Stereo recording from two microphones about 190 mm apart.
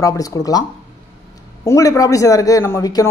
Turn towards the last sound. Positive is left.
turn(degrees=20)  # may be behind; listen again after turning